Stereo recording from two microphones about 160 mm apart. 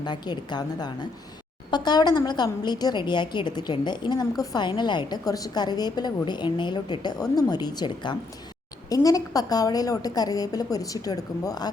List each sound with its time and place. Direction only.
0.0 s a woman's voice: 25° left (ahead or behind)